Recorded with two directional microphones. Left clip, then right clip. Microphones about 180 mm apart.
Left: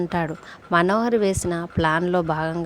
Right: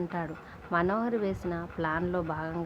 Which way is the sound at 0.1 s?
50° left (ahead or behind).